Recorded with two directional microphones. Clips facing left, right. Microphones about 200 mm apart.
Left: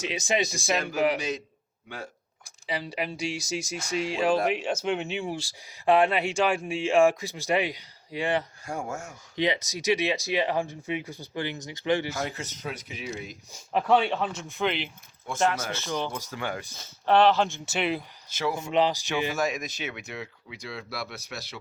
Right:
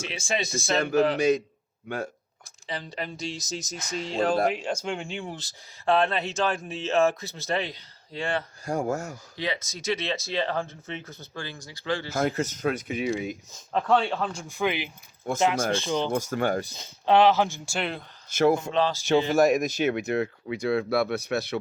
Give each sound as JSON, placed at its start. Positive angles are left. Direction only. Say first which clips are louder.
{"t": 0.0, "sound": "speech", "louder": "left 3 dB", "side_deg": 20}
{"t": 2.6, "sound": "speech", "louder": "left 3 dB", "side_deg": 10}
{"t": 8.6, "sound": "speech", "louder": "right 6 dB", "side_deg": -35}
{"t": 9.3, "sound": "speech", "louder": "left 6 dB", "side_deg": 20}
{"t": 12.1, "sound": "speech", "louder": "right 7 dB", "side_deg": -45}
{"t": 13.5, "sound": "speech", "louder": "left 1 dB", "side_deg": 10}
{"t": 15.4, "sound": "speech", "louder": "right 2 dB", "side_deg": -20}
{"t": 16.1, "sound": "speech", "louder": "right 8 dB", "side_deg": -45}
{"t": 16.7, "sound": "speech", "louder": "left 1 dB", "side_deg": -15}
{"t": 17.7, "sound": "speech", "louder": "left 3 dB", "side_deg": 5}
{"t": 18.3, "sound": "speech", "louder": "right 8 dB", "side_deg": -55}
{"t": 18.7, "sound": "speech", "louder": "left 1 dB", "side_deg": 15}
{"t": 19.3, "sound": "speech", "louder": "right 8 dB", "side_deg": -50}